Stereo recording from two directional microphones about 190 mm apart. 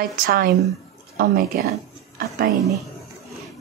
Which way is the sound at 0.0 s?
50° right (ahead or behind).